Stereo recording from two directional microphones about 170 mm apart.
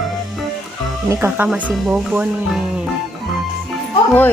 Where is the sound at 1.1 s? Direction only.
15° right (ahead or behind).